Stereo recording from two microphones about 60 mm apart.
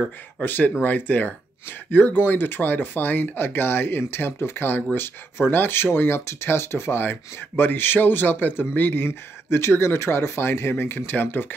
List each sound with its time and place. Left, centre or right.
0.0 s speech: left